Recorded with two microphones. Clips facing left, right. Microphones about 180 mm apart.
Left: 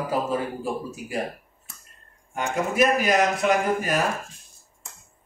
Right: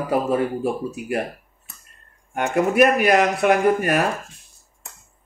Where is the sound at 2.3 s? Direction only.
65° right (ahead or behind).